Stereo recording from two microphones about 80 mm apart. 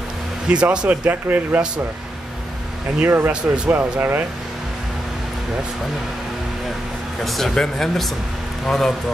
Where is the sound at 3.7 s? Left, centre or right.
Right.